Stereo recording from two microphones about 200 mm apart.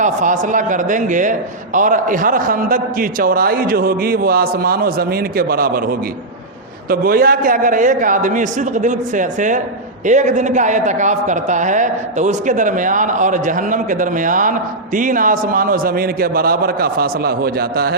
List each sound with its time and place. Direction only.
0.0 s a man's voice: 40° right (ahead or behind)